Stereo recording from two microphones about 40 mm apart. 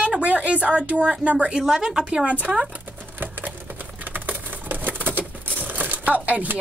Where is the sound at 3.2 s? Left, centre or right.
Right.